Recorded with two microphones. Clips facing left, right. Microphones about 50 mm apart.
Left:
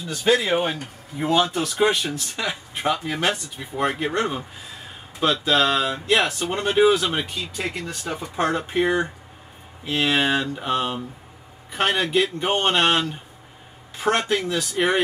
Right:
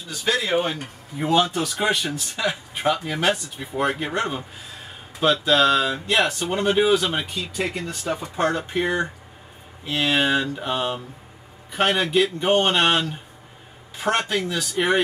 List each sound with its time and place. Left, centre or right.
0.2 s speech: centre
0.7 s speech: centre
8.4 s speech: centre
14.2 s speech: centre